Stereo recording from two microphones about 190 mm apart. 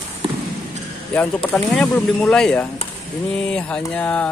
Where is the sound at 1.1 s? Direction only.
10° left (ahead or behind).